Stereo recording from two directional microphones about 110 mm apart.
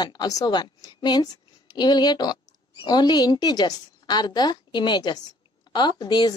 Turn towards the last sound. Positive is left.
turn(degrees=40)  # may be behind; listen again after turning